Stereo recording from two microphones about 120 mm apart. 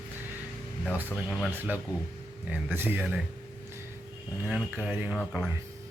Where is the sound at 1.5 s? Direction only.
15° right (ahead or behind).